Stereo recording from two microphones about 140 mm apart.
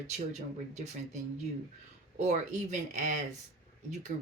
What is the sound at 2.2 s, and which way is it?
Speech, 60° right (ahead or behind).